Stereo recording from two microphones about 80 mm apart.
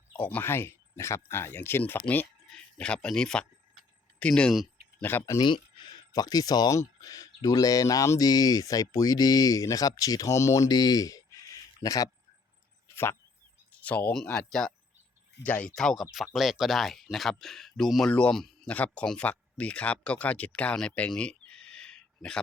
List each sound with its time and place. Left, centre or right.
0.2 s speech: centre
0.4 s speech: left
2.1 s speech: centre
5.1 s speech: left
5.4 s a sound: left
6.1 s speech: left
8.3 s speech: left
13.7 s a sound: centre
14.3 s speech: centre
18.1 s speech: centre
18.3 s speech: centre
18.7 s speech: centre
21.1 s a sound: centre